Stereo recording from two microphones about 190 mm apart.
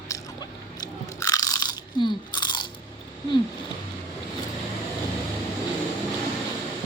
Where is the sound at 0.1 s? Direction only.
20° left (ahead or behind).